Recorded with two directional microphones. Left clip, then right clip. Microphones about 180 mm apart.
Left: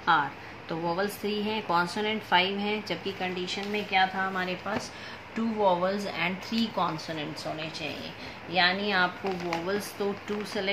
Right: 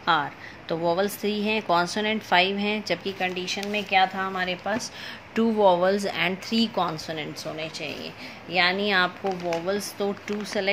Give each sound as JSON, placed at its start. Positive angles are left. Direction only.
{"t": 0.0, "sound": "speech", "side_deg": -40}